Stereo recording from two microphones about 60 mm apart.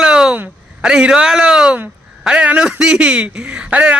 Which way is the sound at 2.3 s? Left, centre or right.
Centre.